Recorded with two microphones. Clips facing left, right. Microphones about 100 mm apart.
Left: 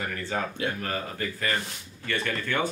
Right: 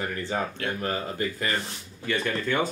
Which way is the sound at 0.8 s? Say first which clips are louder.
Right 3 dB; 20° right (ahead or behind).